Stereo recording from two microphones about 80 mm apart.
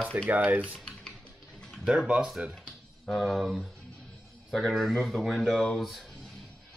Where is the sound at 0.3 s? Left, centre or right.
Centre.